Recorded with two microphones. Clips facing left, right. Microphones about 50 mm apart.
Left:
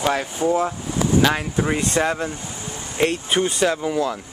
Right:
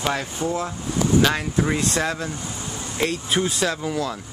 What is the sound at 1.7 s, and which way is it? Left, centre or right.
Speech, left.